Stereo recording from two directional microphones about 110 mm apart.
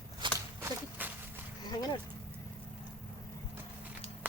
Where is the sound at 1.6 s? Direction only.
40° left (ahead or behind).